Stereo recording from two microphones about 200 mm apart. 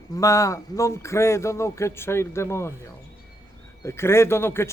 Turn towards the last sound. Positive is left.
turn(degrees=10)  # may be behind; listen again after turning